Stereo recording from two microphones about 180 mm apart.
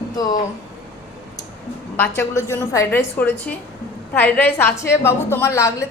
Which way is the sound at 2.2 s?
15° left (ahead or behind).